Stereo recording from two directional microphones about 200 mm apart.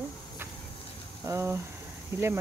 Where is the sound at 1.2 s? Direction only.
15° right (ahead or behind).